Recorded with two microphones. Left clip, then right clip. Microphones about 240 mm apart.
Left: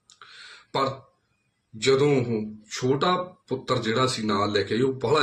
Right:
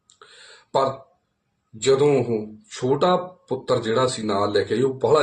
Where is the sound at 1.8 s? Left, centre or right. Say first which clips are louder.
Right 3 dB; left.